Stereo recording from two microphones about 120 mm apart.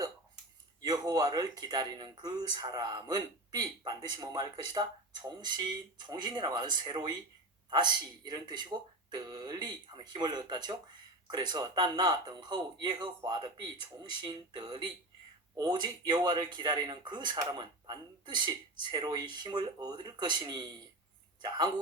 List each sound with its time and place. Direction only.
0.8 s speech: 30° right (ahead or behind)